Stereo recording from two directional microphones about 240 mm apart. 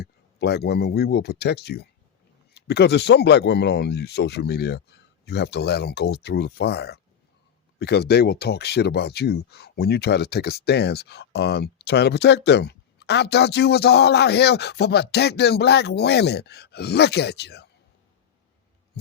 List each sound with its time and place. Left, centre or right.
0.0 s speech: left